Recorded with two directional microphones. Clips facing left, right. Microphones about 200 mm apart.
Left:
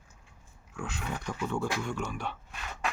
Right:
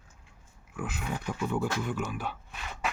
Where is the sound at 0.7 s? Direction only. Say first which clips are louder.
Right 2 dB; 5° right (ahead or behind).